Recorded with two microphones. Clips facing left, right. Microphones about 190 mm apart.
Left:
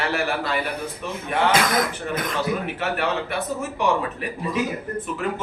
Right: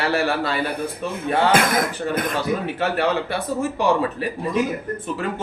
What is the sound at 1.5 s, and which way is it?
Speech, 50° right (ahead or behind).